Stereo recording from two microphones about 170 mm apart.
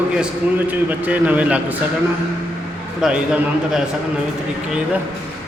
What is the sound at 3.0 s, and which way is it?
Speech, 5° right (ahead or behind).